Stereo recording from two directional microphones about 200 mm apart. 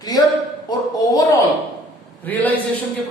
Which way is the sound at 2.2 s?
10° left (ahead or behind).